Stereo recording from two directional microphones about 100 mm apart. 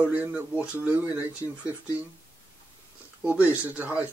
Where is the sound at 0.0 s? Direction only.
15° right (ahead or behind).